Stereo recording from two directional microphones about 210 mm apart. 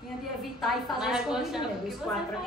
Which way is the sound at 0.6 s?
5° right (ahead or behind).